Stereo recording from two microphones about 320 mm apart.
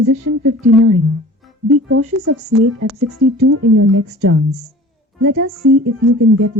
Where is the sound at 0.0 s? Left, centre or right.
Right.